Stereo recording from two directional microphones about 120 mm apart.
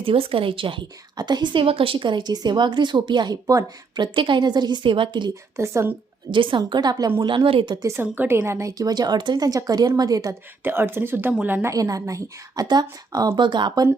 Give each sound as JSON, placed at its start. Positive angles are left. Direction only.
{"t": 0.0, "sound": "a woman's voice", "side_deg": -50}
{"t": 5.5, "sound": "a woman's voice", "side_deg": -25}
{"t": 6.3, "sound": "a woman's voice", "side_deg": -45}
{"t": 7.9, "sound": "a woman's voice", "side_deg": -20}
{"t": 10.6, "sound": "speech", "side_deg": -20}
{"t": 11.7, "sound": "a woman's voice", "side_deg": -30}